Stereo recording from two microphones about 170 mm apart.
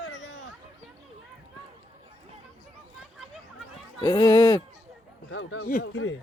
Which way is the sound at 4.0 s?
25° left (ahead or behind).